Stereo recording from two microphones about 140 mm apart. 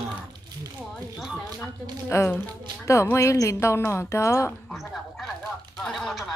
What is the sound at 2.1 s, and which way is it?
Speech, 20° left (ahead or behind).